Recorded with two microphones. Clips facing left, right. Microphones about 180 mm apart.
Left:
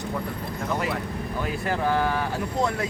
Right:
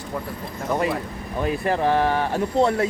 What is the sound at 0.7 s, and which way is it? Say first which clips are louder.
Speech: right 5 dB; 25° right (ahead or behind).